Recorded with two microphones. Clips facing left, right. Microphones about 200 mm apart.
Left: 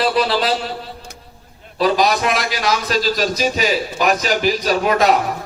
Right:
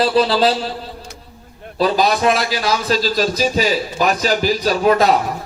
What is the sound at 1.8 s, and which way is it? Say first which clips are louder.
A man's voice: right 1 dB; 30° right (ahead or behind).